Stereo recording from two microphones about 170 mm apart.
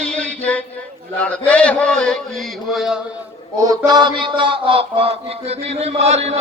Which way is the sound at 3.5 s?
20° right (ahead or behind).